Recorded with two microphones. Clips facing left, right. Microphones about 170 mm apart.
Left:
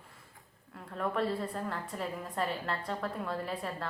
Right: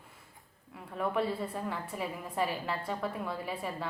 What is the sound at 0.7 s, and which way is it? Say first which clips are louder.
Speech: right 1 dB; 5° right (ahead or behind).